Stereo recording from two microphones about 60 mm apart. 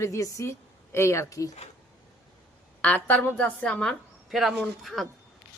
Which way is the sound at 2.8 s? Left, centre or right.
Left.